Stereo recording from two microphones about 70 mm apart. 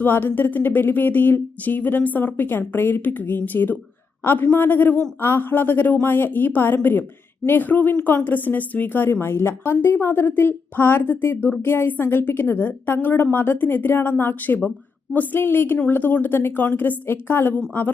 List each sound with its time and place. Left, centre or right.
0.0 s a woman's voice: left